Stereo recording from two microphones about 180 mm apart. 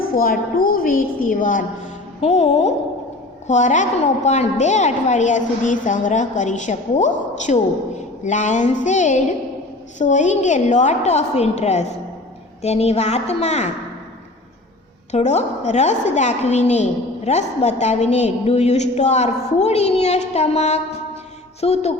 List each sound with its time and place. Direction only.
0.0 s a woman's voice: 55° left (ahead or behind)
2.2 s a woman's voice: 35° left (ahead or behind)
15.1 s a woman's voice: 40° left (ahead or behind)